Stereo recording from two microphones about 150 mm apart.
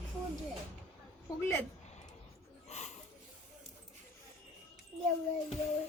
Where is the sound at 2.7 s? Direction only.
50° left (ahead or behind).